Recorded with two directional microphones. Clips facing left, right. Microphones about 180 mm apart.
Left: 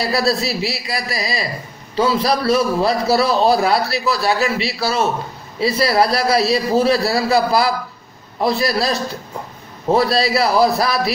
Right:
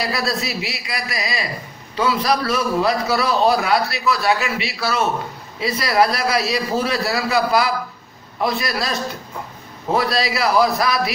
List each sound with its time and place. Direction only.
0.1 s a man's voice: 35° left (ahead or behind)
9.9 s a man's voice: 35° left (ahead or behind)